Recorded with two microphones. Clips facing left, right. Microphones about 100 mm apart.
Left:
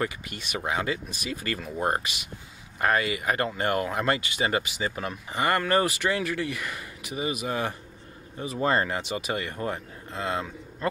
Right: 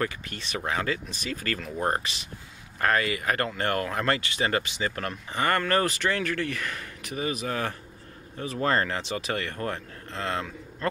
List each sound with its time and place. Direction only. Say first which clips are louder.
0.0 s speech: even; 10° left (ahead or behind)